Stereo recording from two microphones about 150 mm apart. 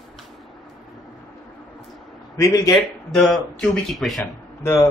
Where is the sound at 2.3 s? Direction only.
20° left (ahead or behind).